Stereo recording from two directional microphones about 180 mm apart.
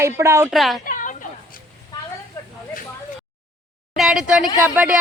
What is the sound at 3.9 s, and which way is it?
A woman's voice, centre (ahead or behind).